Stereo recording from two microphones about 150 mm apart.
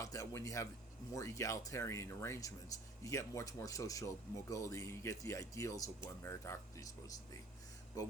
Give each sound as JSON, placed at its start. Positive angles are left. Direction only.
{"t": 0.0, "sound": "a man's voice", "side_deg": 20}
{"t": 8.0, "sound": "speech", "side_deg": 25}